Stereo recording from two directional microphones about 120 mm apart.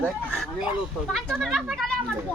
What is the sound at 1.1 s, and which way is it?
Speech, centre (ahead or behind).